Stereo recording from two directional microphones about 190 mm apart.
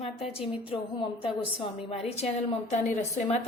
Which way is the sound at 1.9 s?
35° left (ahead or behind).